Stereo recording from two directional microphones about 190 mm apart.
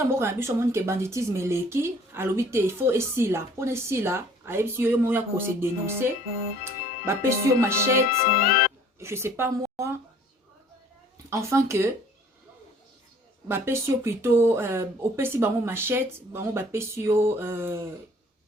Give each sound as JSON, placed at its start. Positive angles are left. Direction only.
{"t": 0.1, "sound": "a woman's voice", "side_deg": -15}
{"t": 8.3, "sound": "music", "side_deg": 50}
{"t": 9.0, "sound": "a woman's voice", "side_deg": -15}
{"t": 11.3, "sound": "a woman's voice", "side_deg": -15}
{"t": 13.5, "sound": "a woman's voice", "side_deg": -15}